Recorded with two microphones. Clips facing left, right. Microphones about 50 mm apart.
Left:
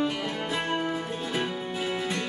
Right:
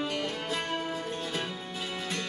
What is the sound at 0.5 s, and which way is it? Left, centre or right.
Music, centre.